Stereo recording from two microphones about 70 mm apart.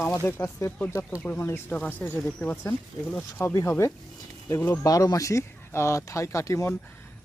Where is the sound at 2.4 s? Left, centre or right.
Left.